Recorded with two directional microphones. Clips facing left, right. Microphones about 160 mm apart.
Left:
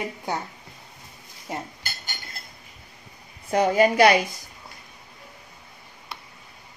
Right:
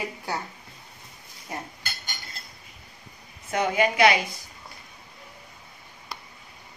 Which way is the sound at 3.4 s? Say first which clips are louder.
Left 5 dB; 35° left (ahead or behind).